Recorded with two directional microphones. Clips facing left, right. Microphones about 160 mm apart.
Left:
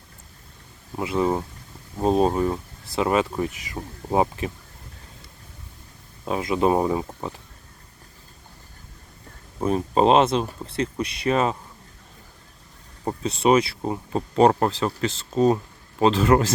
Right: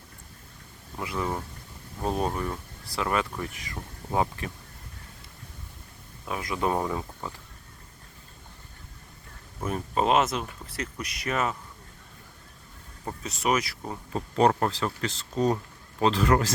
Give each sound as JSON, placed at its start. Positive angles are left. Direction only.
{"t": 0.9, "sound": "speech", "side_deg": 25}
{"t": 6.2, "sound": "speech", "side_deg": 25}
{"t": 7.1, "sound": "speech", "side_deg": 30}
{"t": 9.6, "sound": "speech", "side_deg": 30}
{"t": 13.1, "sound": "speech", "side_deg": 30}